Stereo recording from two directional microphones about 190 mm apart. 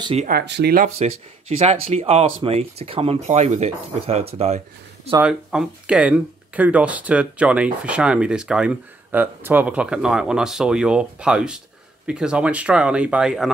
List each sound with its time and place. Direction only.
0.0 s speech: 30° right (ahead or behind)
0.3 s speech: 60° right (ahead or behind)
0.8 s speech: 35° right (ahead or behind)
5.2 s speech: 5° right (ahead or behind)